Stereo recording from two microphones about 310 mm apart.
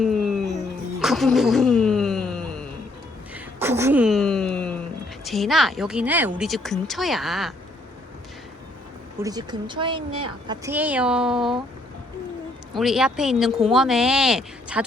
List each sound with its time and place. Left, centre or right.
0.0 s music: centre
3.3 s a sound: centre
5.2 s a woman's voice: centre
9.2 s speech: centre
12.7 s a woman's voice: centre